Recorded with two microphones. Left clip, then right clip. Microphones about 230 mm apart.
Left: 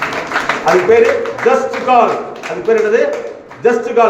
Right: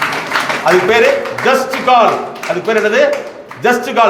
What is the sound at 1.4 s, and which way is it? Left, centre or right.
A man's voice, right.